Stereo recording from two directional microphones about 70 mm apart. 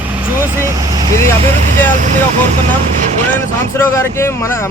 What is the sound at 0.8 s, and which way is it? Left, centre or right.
Vehicle, right.